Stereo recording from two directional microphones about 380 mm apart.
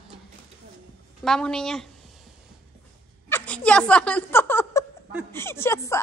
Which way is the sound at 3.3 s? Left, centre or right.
Centre.